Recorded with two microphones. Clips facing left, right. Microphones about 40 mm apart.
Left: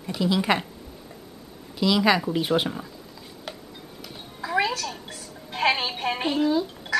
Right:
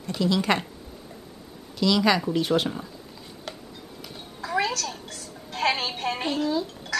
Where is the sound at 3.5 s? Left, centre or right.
Centre.